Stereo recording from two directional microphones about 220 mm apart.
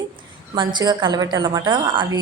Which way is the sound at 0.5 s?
20° right (ahead or behind).